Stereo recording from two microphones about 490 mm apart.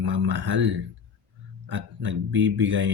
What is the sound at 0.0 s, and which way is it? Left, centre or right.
Speech, right.